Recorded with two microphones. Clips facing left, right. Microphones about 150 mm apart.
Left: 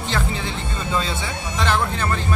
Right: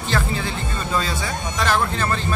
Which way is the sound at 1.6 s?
20° left (ahead or behind).